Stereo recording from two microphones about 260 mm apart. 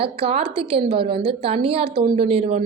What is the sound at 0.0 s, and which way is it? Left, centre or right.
A woman's voice, right.